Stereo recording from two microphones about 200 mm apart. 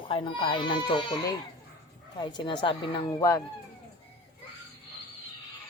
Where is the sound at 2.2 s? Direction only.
25° left (ahead or behind).